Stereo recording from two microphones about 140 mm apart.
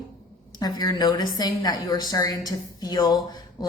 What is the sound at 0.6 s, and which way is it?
A woman's voice, 30° left (ahead or behind).